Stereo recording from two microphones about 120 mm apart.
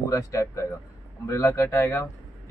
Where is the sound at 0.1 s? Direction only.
25° left (ahead or behind).